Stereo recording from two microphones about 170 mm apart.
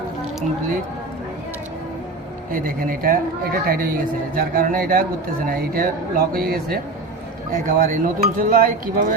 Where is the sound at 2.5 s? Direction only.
55° right (ahead or behind).